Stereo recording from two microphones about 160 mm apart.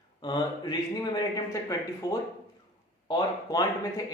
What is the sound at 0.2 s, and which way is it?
Speech, 25° left (ahead or behind).